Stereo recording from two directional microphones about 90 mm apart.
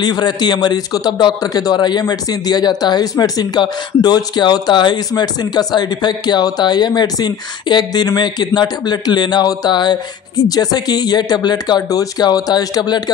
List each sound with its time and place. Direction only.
0.0 s a man's voice: 50° left (ahead or behind)